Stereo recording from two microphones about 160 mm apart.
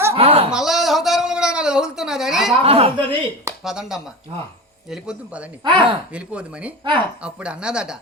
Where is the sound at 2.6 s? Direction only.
40° right (ahead or behind).